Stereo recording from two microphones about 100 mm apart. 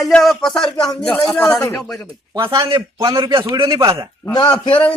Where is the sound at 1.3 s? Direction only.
15° left (ahead or behind).